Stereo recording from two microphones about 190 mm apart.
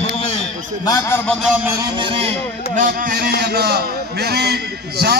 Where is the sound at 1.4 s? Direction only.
5° right (ahead or behind); by 2.3 s 25° right (ahead or behind).